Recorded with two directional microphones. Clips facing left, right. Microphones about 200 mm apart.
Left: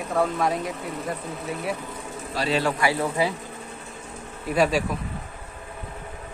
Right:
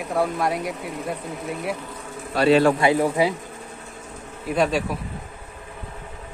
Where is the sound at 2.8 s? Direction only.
20° right (ahead or behind).